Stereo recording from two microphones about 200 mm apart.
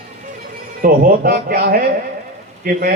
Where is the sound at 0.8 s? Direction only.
45° right (ahead or behind).